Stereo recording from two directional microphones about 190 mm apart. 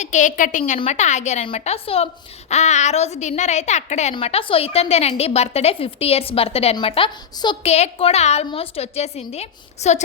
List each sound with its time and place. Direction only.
0.0 s a woman's voice: 40° left (ahead or behind)